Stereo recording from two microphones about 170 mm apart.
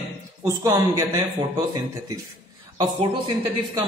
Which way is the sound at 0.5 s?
20° right (ahead or behind).